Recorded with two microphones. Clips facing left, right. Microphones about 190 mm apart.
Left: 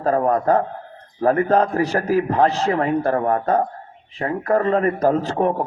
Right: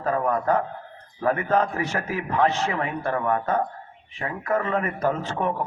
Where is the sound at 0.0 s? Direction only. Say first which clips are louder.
Left 5 dB; 35° left (ahead or behind).